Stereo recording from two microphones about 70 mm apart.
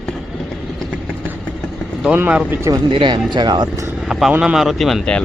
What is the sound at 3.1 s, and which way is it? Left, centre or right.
Speech, right.